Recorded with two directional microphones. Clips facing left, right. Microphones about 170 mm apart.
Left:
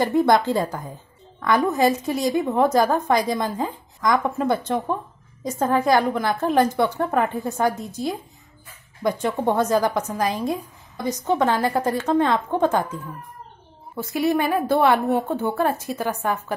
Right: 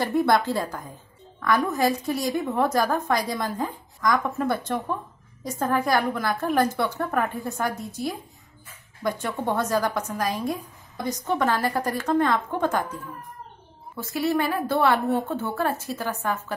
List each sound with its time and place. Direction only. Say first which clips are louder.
0.0 s a woman's voice: left 3 dB; 20° left (ahead or behind)
9.6 s a woman's voice: left 4 dB; 20° left (ahead or behind)
13.9 s a woman's voice: left 3 dB; 15° left (ahead or behind)